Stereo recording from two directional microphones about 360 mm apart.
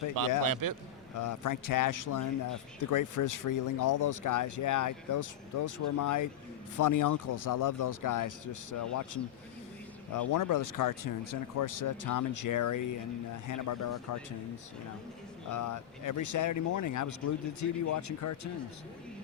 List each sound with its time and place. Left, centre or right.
0.4 s a man's voice: right
1.1 s speech: left
15.4 s speech: left